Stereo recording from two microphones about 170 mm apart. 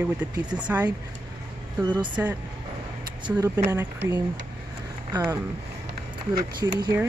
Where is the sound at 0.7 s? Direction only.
10° right (ahead or behind).